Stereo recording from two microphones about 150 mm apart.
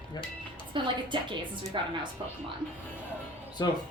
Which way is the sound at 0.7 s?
35° right (ahead or behind).